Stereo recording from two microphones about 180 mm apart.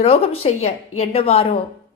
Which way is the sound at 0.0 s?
35° left (ahead or behind).